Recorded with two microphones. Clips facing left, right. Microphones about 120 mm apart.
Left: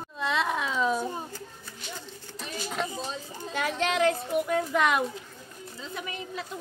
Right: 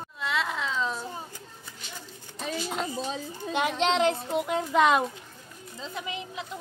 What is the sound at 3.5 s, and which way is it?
A child's voice, 20° right (ahead or behind).